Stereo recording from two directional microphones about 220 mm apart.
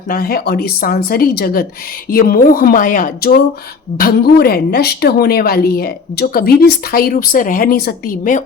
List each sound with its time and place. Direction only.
0.1 s a woman's voice: 40° left (ahead or behind)